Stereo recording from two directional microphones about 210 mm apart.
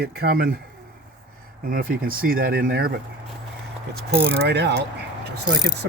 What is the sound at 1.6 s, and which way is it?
Coin, 45° right (ahead or behind).